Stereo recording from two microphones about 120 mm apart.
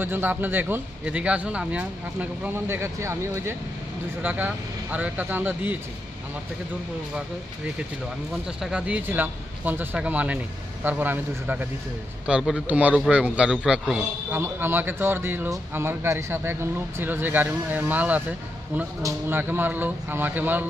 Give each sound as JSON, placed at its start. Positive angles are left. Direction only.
{"t": 0.0, "sound": "speech", "side_deg": -15}
{"t": 8.5, "sound": "speech", "side_deg": -5}
{"t": 14.3, "sound": "speech", "side_deg": -20}